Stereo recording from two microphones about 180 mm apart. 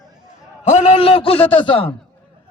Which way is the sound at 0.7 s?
40° left (ahead or behind).